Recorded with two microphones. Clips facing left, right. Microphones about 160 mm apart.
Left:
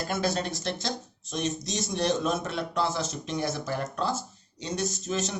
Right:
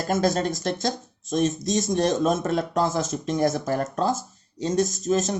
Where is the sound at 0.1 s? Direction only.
45° right (ahead or behind).